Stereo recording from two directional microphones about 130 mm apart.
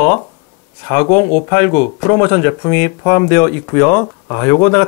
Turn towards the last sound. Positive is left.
turn(degrees=20)  # may be behind; listen again after turning